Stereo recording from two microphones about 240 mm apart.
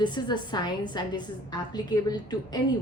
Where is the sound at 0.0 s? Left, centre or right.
Centre.